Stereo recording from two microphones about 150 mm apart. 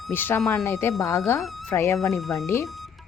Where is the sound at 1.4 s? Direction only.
Centre (ahead or behind).